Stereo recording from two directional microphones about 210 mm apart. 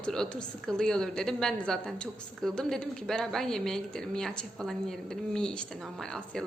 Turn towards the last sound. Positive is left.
turn(degrees=5)  # may be behind; listen again after turning